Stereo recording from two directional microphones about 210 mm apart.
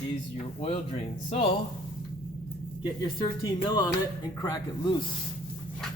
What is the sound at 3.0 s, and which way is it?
Speech, 20° left (ahead or behind).